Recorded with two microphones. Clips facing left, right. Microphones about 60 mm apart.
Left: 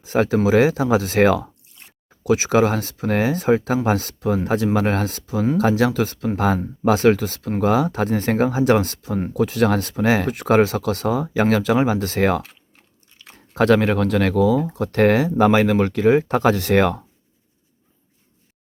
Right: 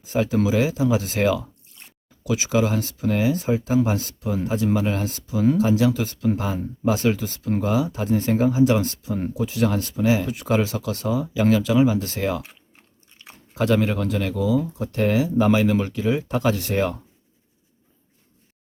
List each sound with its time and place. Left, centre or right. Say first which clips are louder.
0.0 s speech: left 3 dB; left
13.6 s speech: left 5 dB; left